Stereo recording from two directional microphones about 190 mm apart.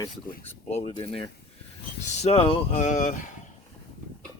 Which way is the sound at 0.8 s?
25° left (ahead or behind).